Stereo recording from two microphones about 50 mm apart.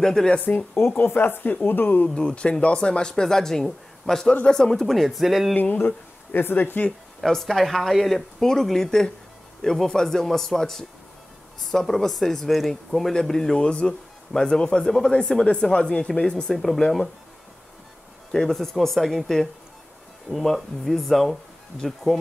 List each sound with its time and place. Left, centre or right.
0.0 s speech: centre
0.9 s a woman's voice: left
2.1 s speech: centre
5.6 s speech: left
7.2 s speech: centre
13.1 s speech: centre
16.5 s speech: centre
18.3 s speech: centre